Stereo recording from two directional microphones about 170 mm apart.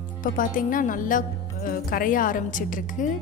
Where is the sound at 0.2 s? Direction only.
55° left (ahead or behind).